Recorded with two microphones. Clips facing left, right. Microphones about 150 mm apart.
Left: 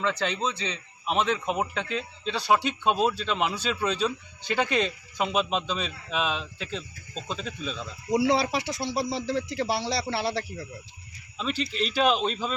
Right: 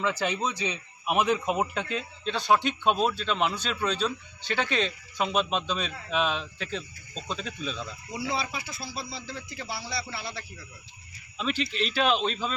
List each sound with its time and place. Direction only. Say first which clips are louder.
0.0 s a man's voice: even; 10° right (ahead or behind)
8.1 s speech: left 9 dB; 85° left
11.6 s speech: left 3 dB; centre (ahead or behind)